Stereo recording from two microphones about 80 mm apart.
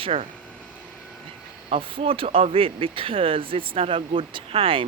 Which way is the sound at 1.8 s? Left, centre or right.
Right.